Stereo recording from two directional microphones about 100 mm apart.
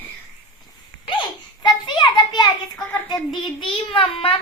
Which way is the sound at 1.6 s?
45° left (ahead or behind).